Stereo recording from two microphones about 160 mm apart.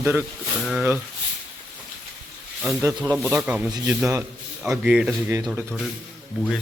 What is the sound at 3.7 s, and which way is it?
Speech, 25° right (ahead or behind).